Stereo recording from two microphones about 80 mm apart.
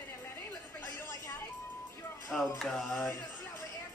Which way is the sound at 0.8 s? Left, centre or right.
Left.